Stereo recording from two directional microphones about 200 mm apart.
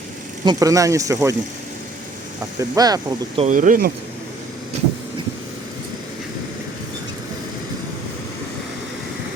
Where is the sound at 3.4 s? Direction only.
40° right (ahead or behind).